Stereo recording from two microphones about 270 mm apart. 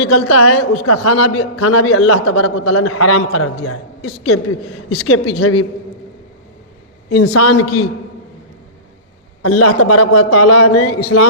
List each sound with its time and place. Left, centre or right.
0.0 s a man's voice: left
7.1 s a man's voice: left
9.4 s a man's voice: left